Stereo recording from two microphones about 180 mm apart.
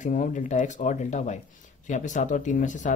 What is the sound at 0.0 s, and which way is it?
Speech, 45° left (ahead or behind).